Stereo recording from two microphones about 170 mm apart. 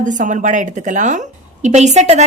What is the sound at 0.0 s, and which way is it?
A woman's voice, 45° right (ahead or behind).